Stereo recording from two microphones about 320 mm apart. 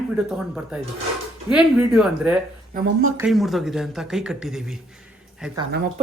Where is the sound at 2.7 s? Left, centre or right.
Right.